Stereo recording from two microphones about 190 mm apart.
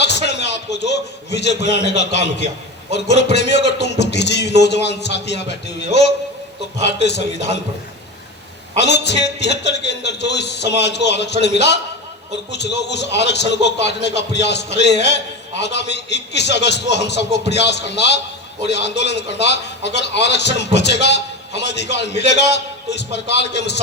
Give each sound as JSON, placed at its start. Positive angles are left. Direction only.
{"t": 0.0, "sound": "a man's voice", "side_deg": 65}
{"t": 8.8, "sound": "a man's voice", "side_deg": 65}